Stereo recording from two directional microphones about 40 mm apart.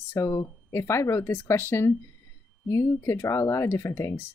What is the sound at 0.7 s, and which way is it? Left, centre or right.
Speech, left.